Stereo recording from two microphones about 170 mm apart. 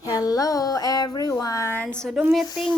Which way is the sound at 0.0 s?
20° left (ahead or behind).